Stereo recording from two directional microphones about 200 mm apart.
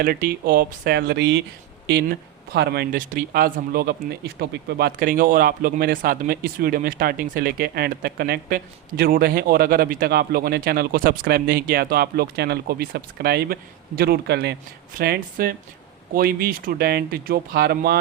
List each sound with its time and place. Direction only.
0.0 s speech: 50° right (ahead or behind)